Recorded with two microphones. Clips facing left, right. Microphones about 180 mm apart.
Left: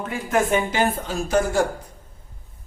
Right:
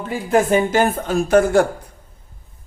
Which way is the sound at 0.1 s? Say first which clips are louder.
Right 5 dB; 35° right (ahead or behind).